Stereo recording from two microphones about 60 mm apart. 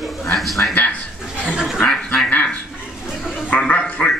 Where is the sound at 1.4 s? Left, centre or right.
Centre.